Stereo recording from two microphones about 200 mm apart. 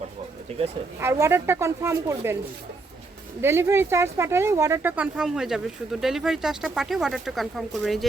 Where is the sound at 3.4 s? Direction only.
15° right (ahead or behind).